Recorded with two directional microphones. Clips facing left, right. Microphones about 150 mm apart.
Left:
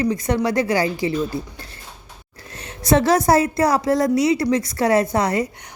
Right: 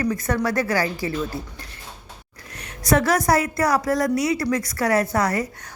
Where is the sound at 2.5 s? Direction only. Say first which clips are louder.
Left 3 dB; 25° left (ahead or behind).